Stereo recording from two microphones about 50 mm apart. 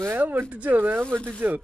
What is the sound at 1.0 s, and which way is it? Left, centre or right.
Speech, left.